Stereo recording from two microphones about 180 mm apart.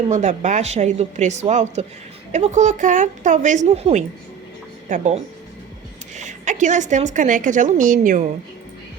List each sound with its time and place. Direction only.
0.1 s a woman's voice: 40° right (ahead or behind)